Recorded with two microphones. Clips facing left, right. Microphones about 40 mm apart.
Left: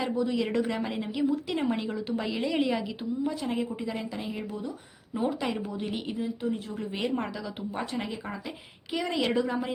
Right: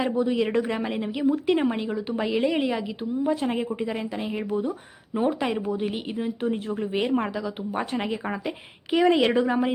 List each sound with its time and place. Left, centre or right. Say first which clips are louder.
0.0 s a woman's voice: right 5 dB; right
1.3 s a woman's voice: right 6 dB; right
1.7 s a woman's voice: right 3 dB; centre
3.2 s a woman's voice: right 7 dB; right
6.1 s a woman's voice: right 5 dB; right
6.7 s a woman's voice: right 6 dB; right